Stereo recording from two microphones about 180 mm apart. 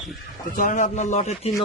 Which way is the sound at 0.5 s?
45° left (ahead or behind).